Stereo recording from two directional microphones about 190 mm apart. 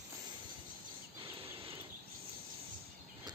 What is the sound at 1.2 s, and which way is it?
Cricket, 30° right (ahead or behind).